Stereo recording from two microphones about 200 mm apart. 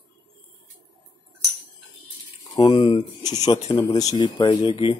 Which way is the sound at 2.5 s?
25° left (ahead or behind).